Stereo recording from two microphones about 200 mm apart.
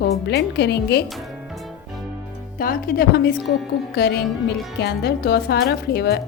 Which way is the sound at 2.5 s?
45° left (ahead or behind).